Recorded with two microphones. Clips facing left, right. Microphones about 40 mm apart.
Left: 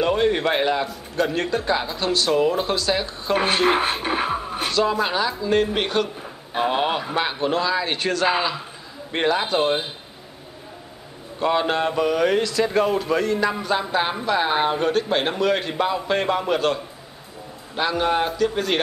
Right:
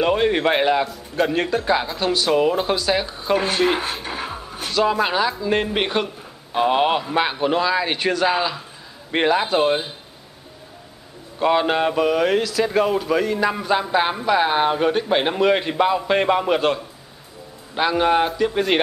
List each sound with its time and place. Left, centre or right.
0.0 s speech: centre
3.3 s speech: left
4.0 s music: left
4.7 s speech: centre
6.0 s a sound: centre
6.7 s a man's voice: centre
9.1 s speech: centre
11.3 s speech: centre
17.7 s speech: centre